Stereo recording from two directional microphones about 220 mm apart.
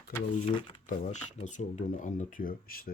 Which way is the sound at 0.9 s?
35° left (ahead or behind).